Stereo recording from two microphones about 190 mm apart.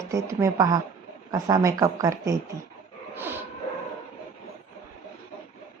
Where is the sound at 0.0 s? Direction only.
15° right (ahead or behind).